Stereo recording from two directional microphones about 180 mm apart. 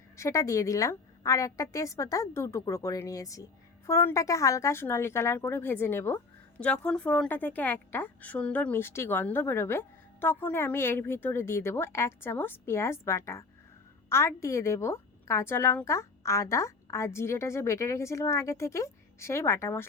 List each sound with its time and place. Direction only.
0.2 s a woman's voice: 15° left (ahead or behind)